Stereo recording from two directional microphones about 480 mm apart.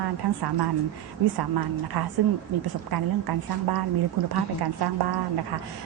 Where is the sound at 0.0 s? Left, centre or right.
Right.